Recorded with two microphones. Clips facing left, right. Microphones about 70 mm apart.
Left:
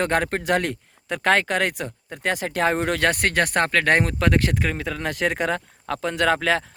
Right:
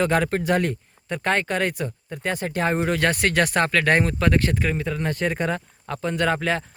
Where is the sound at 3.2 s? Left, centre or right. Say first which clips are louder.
Even; left.